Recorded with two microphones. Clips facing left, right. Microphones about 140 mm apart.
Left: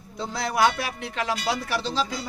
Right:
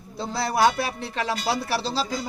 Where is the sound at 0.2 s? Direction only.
30° right (ahead or behind).